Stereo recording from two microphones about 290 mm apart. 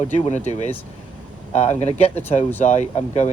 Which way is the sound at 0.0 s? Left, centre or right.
Left.